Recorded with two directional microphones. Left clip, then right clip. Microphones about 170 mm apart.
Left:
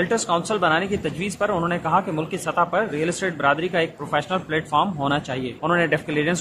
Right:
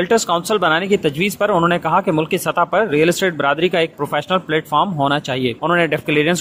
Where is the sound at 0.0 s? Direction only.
40° right (ahead or behind).